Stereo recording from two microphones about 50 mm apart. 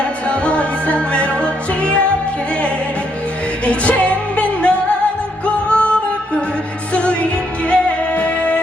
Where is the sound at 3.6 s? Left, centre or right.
Left.